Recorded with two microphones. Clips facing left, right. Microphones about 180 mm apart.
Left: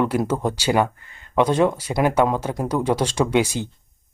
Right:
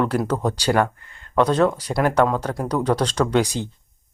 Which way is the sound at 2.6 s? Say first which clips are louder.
Even; 10° left (ahead or behind).